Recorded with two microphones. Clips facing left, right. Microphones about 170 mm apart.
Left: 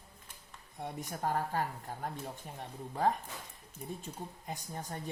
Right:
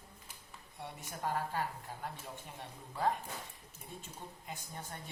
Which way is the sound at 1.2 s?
45° left (ahead or behind).